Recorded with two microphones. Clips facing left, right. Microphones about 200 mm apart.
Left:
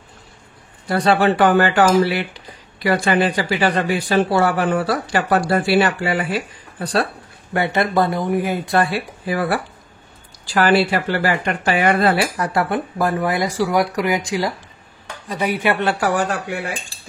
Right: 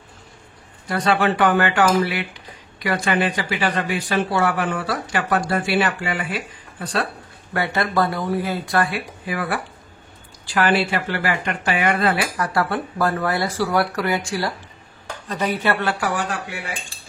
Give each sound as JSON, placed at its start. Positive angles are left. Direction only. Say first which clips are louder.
{"t": 0.8, "sound": "speech", "louder": "left 4 dB", "side_deg": 35}
{"t": 7.5, "sound": "speech", "louder": "left 3 dB", "side_deg": 20}
{"t": 12.5, "sound": "speech", "louder": "left 2 dB", "side_deg": 20}
{"t": 16.0, "sound": "speech", "louder": "left 5 dB", "side_deg": 45}